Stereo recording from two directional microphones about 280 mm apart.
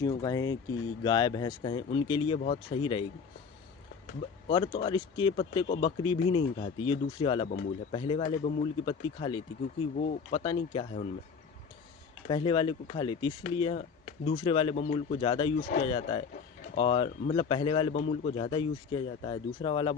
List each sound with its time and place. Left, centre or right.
0.0 s speech: centre
4.4 s speech: centre
10.0 s speech: left
10.4 s speech: centre
12.3 s speech: centre